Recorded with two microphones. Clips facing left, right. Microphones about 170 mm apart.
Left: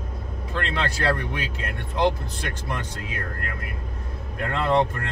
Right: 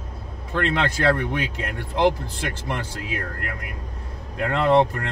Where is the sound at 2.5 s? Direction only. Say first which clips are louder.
Right 2 dB; 30° right (ahead or behind).